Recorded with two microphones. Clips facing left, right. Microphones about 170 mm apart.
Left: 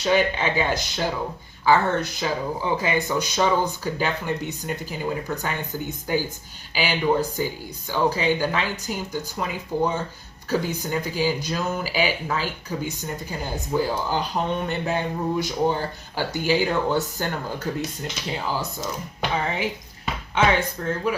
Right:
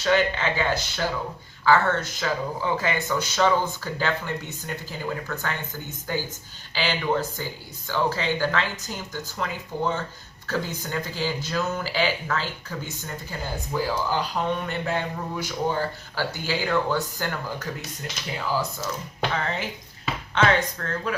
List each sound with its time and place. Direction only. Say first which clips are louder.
0.0 s speech: left 1 dB; 15° left (ahead or behind)
20.3 s speech: left 1 dB; 10° left (ahead or behind)